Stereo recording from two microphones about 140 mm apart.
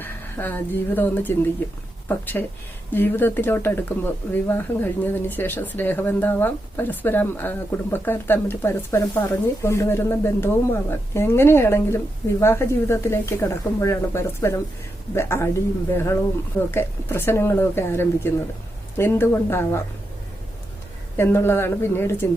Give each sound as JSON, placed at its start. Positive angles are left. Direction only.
{"t": 0.0, "sound": "speech", "side_deg": 15}
{"t": 16.7, "sound": "speech", "side_deg": 15}
{"t": 21.2, "sound": "speech", "side_deg": 15}